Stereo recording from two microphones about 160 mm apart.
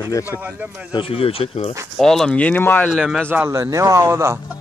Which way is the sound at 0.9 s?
35° left (ahead or behind).